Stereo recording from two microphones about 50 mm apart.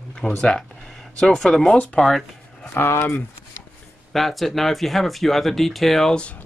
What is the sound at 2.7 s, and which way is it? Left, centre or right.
Speech, left.